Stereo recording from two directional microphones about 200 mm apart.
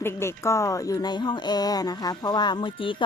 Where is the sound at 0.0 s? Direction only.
10° left (ahead or behind).